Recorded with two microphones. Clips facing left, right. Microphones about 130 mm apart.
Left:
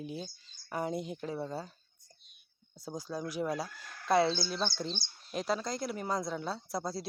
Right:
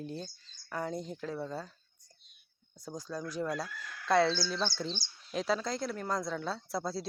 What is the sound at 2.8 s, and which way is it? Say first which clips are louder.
Speech: left 1 dB; 10° left (ahead or behind).